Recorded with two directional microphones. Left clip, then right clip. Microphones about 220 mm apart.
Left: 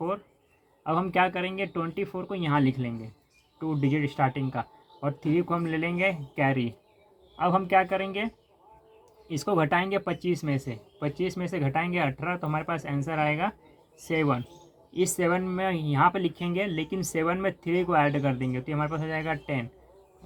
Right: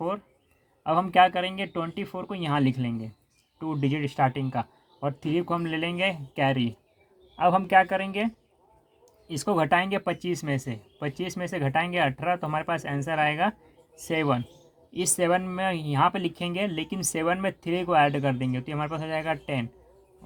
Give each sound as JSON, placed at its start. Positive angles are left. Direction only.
{"t": 0.9, "sound": "speech", "side_deg": -35}
{"t": 9.4, "sound": "speech", "side_deg": -35}